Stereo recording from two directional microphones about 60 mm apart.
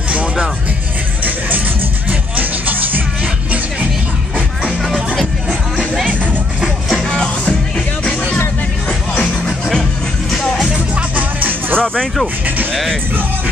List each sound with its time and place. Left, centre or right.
2.0 s music: right
4.9 s music: centre
7.1 s music: centre
11.0 s music: right
11.8 s speech: centre